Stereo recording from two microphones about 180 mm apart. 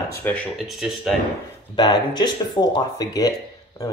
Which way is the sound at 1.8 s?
25° left (ahead or behind).